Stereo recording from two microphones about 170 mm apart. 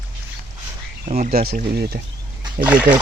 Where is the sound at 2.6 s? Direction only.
55° right (ahead or behind).